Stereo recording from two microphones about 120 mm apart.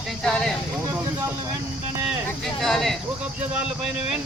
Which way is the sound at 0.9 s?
25° right (ahead or behind).